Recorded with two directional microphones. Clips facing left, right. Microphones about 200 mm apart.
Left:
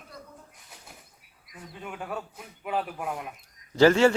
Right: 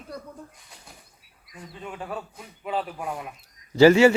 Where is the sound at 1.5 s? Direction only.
Centre (ahead or behind).